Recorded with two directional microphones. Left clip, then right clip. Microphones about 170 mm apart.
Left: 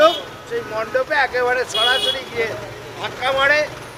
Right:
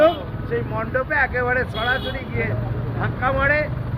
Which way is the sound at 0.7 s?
35° left (ahead or behind).